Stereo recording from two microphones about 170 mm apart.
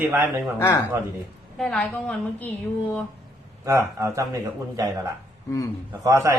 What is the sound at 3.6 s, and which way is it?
Speech, 15° right (ahead or behind).